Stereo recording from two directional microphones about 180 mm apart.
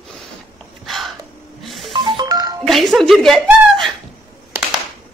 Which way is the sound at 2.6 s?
Centre (ahead or behind).